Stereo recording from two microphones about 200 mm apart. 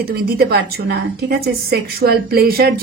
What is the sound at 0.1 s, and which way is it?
A woman's voice, 50° right (ahead or behind).